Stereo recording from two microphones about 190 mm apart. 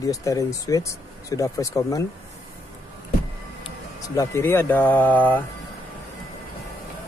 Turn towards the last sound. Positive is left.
turn(degrees=10)  # may be behind; listen again after turning